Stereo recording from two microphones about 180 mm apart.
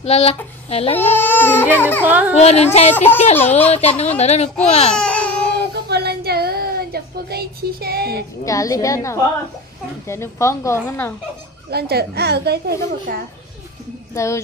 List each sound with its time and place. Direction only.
0.0 s speech: 35° left (ahead or behind)
0.9 s speech: 10° left (ahead or behind)
2.0 s a child's voice: 10° right (ahead or behind)
2.3 s speech: 35° left (ahead or behind)
2.9 s speech: 10° left (ahead or behind)
3.6 s speech: 35° left (ahead or behind)
4.9 s babbling: 5° left (ahead or behind)
5.9 s child singing: 65° right (ahead or behind)
8.5 s speech: 20° left (ahead or behind)
11.7 s a woman's voice: 60° right (ahead or behind)
13.1 s a child's voice: 50° right (ahead or behind)
14.1 s speech: 15° left (ahead or behind)